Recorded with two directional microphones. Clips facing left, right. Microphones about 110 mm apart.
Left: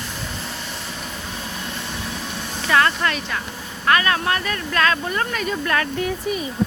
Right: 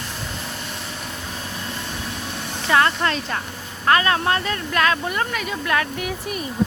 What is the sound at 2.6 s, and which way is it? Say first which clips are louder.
Speech: even; 25° right (ahead or behind).